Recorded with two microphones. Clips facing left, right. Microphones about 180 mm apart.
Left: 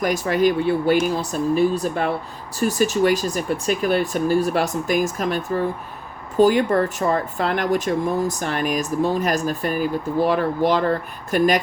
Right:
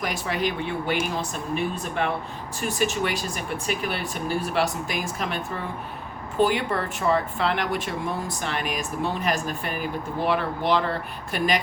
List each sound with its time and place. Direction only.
0.0 s speech: 45° left (ahead or behind)